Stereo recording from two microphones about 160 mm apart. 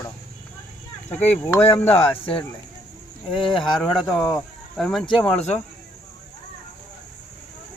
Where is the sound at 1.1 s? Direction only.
10° left (ahead or behind).